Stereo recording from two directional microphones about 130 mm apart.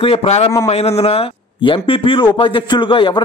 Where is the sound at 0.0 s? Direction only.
45° left (ahead or behind).